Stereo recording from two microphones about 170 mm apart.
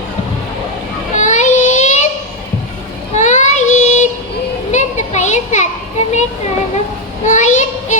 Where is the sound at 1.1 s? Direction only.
45° left (ahead or behind).